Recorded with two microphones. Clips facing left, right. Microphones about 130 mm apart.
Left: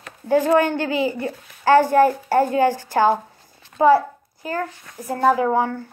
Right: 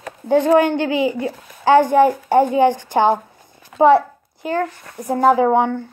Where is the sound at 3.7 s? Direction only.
90° right.